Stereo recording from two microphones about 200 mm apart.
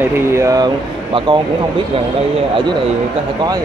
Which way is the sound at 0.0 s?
15° right (ahead or behind).